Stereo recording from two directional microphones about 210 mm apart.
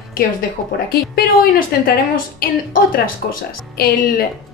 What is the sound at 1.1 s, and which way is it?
A woman's voice, 45° left (ahead or behind).